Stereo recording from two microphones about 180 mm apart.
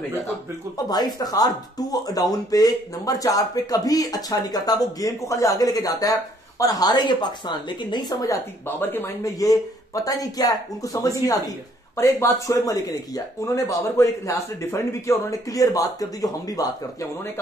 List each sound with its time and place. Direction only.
0.7 s speech: 20° left (ahead or behind)